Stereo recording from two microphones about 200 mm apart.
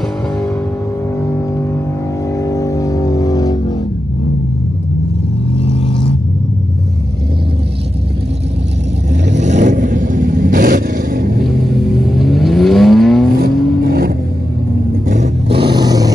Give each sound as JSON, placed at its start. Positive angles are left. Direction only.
{"t": 1.2, "sound": "music", "side_deg": 15}
{"t": 5.6, "sound": "vehicle", "side_deg": 25}
{"t": 9.4, "sound": "vehicle", "side_deg": -35}
{"t": 11.7, "sound": "vehicle", "side_deg": 0}
{"t": 13.4, "sound": "vehicle", "side_deg": -50}
{"t": 15.0, "sound": "vehicle", "side_deg": -35}
{"t": 15.7, "sound": "vehicle", "side_deg": -20}